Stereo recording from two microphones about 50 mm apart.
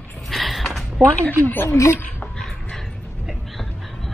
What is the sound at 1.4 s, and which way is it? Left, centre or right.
Speech, left.